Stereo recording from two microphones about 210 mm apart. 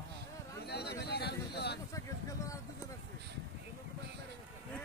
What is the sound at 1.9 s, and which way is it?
Vehicle, 15° left (ahead or behind).